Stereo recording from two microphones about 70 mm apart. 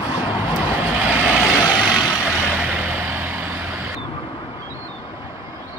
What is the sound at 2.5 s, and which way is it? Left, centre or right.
Vehicle, right.